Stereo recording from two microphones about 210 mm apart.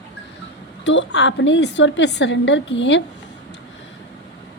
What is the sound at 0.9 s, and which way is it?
A woman's voice, 55° left (ahead or behind).